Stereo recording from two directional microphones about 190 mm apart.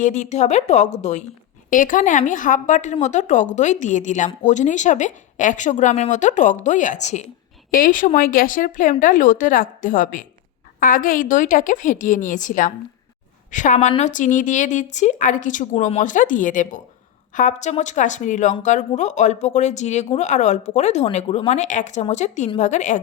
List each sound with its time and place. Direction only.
0.0 s a woman's voice: 40° left (ahead or behind)